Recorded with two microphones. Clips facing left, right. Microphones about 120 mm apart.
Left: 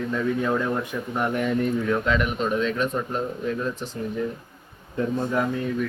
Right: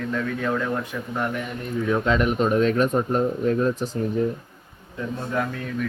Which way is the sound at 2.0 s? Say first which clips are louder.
Right 3 dB; 35° right (ahead or behind).